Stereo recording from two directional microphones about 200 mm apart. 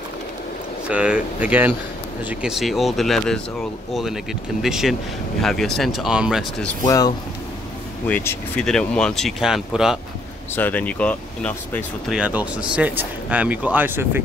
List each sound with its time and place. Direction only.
0.8 s speech: 5° right (ahead or behind)
6.8 s speech: 20° left (ahead or behind); by 9.9 s 5° right (ahead or behind)
10.5 s speech: 10° left (ahead or behind)
12.2 s speech: 5° right (ahead or behind)